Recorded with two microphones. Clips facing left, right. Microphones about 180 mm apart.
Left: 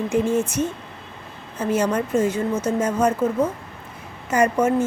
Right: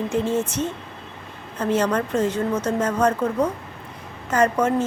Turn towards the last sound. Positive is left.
turn(degrees=10)  # may be behind; listen again after turning